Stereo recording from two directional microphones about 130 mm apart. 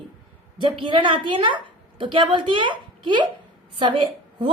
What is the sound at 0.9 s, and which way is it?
A woman's voice, 40° right (ahead or behind).